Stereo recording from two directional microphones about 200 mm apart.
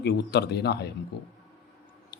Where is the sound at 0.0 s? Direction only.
55° left (ahead or behind).